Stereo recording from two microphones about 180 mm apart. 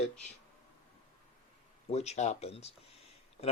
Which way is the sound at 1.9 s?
35° left (ahead or behind).